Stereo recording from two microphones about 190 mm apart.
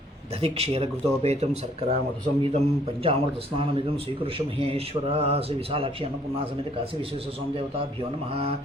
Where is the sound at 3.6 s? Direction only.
30° right (ahead or behind).